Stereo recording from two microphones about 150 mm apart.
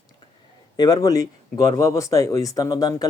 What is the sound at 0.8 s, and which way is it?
Speech, 25° left (ahead or behind).